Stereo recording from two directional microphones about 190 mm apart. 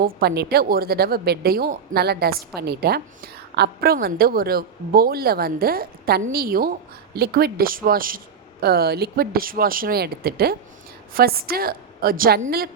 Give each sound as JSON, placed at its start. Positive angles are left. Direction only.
{"t": 0.0, "sound": "a woman's voice", "side_deg": -55}